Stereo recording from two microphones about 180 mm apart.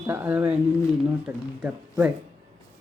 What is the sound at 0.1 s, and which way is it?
Speech, 10° right (ahead or behind).